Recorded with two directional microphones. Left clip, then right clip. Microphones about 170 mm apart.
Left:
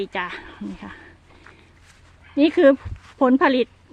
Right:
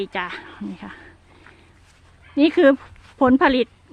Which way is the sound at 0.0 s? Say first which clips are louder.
Even; 10° right (ahead or behind).